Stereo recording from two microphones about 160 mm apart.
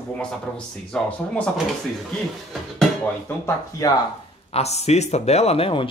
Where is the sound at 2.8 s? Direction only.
10° left (ahead or behind).